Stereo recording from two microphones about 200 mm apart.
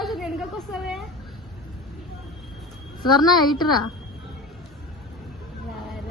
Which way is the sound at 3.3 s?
20° left (ahead or behind).